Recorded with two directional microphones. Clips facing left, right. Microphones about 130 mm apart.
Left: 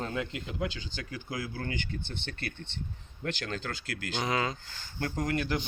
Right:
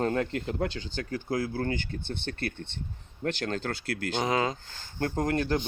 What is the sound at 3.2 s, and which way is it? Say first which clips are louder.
Speech: right 5 dB; 40° right (ahead or behind).